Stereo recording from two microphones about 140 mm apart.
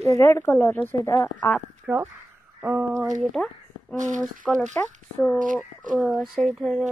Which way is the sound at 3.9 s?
60° right (ahead or behind).